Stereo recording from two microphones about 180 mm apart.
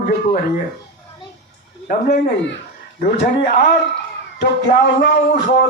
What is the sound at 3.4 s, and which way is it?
A man's voice, 60° left (ahead or behind).